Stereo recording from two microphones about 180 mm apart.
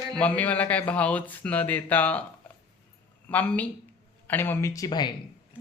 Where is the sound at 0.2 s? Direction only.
10° left (ahead or behind).